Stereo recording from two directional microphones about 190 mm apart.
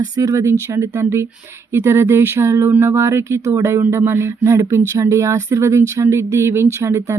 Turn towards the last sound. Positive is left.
turn(degrees=-15)  # may be behind; listen again after turning